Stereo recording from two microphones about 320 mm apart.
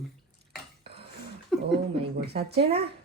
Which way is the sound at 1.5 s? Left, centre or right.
Centre.